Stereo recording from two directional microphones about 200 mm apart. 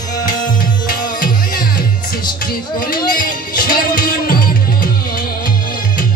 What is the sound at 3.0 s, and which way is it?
Music, 45° left (ahead or behind).